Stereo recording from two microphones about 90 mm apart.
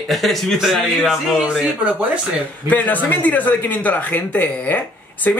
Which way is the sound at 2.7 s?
20° left (ahead or behind).